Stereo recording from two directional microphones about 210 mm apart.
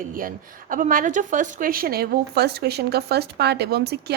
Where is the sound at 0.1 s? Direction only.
40° right (ahead or behind).